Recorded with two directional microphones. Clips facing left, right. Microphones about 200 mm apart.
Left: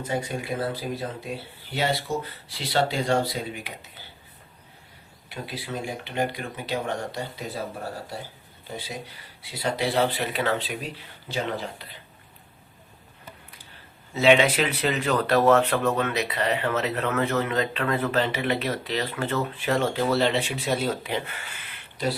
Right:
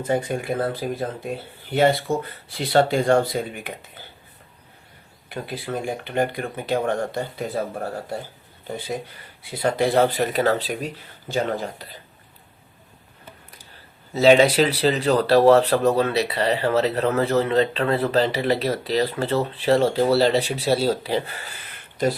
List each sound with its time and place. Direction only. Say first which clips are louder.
0.1 s speech: right 6 dB; 50° right (ahead or behind)
5.3 s speech: right 5 dB; 50° right (ahead or behind)
8.7 s speech: right 6 dB; 50° right (ahead or behind)
14.1 s speech: right 4 dB; 35° right (ahead or behind)